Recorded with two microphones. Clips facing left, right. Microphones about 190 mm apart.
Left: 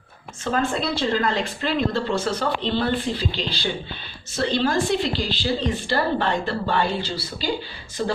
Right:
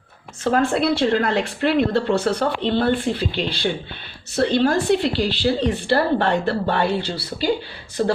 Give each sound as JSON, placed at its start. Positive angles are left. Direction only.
{"t": 0.5, "sound": "a woman's voice", "side_deg": -65}